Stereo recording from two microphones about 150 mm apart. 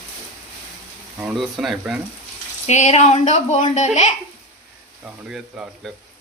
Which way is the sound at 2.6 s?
50° left (ahead or behind).